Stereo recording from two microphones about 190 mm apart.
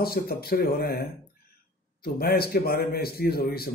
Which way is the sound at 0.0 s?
55° left (ahead or behind).